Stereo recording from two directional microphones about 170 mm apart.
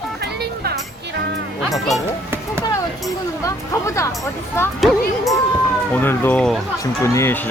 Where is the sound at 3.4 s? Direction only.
20° left (ahead or behind).